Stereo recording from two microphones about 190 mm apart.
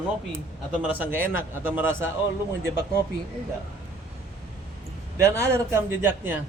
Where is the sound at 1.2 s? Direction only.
90° left.